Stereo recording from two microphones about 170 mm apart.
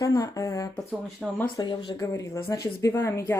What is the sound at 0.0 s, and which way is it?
Speech, 20° left (ahead or behind).